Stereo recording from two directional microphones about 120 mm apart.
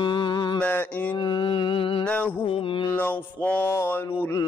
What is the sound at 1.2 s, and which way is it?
Music, 40° left (ahead or behind).